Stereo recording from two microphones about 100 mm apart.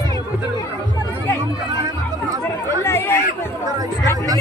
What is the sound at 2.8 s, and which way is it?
Chatter, 25° left (ahead or behind).